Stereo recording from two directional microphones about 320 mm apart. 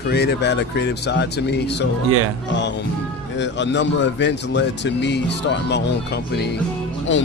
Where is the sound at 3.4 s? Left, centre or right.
Left.